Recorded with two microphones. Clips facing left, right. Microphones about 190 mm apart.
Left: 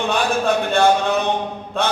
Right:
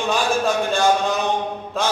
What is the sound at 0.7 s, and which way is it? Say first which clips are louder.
Speech: left 4 dB; 60° left (ahead or behind).